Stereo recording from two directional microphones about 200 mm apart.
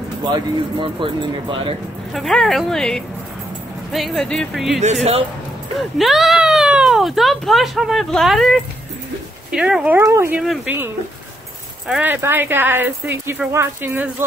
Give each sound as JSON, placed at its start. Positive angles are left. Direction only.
{"t": 0.2, "sound": "speech", "side_deg": -25}
{"t": 2.1, "sound": "speech", "side_deg": 0}
{"t": 5.8, "sound": "speech", "side_deg": 0}
{"t": 10.4, "sound": "speech", "side_deg": 0}
{"t": 11.9, "sound": "speech", "side_deg": -10}